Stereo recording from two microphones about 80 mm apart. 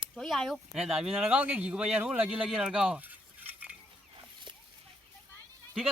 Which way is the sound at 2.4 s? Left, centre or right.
Centre.